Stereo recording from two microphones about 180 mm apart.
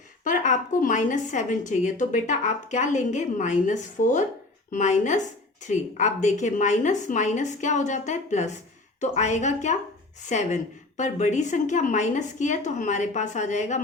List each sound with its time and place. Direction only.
0.3 s a woman's voice: 45° left (ahead or behind)